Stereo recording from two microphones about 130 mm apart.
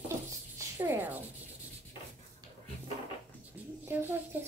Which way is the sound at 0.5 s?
20° right (ahead or behind).